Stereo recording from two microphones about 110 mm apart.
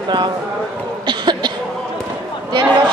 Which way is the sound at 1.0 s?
45° right (ahead or behind).